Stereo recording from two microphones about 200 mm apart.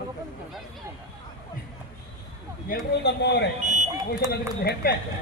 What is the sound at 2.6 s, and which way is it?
Speech, 50° left (ahead or behind).